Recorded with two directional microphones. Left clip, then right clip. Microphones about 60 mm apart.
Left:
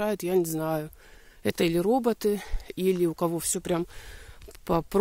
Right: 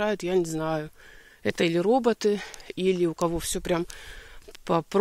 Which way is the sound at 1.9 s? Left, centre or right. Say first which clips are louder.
Right 2 dB; left.